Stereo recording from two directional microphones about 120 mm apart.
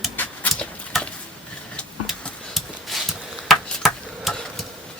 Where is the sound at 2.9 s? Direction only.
Centre (ahead or behind).